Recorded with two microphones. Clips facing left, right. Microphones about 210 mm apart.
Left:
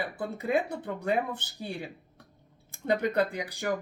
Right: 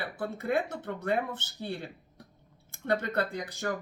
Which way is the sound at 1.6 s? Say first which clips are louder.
Right 1 dB; 15° left (ahead or behind).